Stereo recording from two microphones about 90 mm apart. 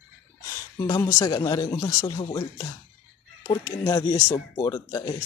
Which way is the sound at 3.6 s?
40° left (ahead or behind).